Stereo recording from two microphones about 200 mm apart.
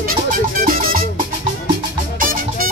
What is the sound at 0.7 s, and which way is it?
Music, 45° right (ahead or behind).